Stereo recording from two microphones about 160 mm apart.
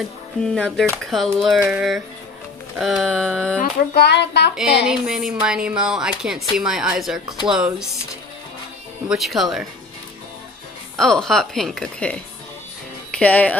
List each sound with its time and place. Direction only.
0.4 s speech: 5° left (ahead or behind)
3.9 s speech: 90° left
4.8 s speech: 5° right (ahead or behind)
9.1 s speech: centre (ahead or behind)
11.0 s speech: 5° left (ahead or behind)
13.2 s speech: 10° left (ahead or behind)